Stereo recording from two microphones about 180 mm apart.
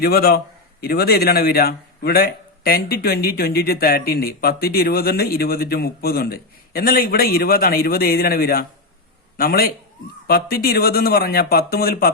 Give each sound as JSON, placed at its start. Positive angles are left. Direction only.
{"t": 0.0, "sound": "speech", "side_deg": 60}